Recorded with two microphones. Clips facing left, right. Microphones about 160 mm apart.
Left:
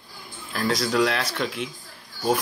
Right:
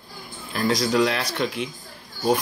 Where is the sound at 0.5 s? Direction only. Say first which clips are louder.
Right 2 dB; centre (ahead or behind).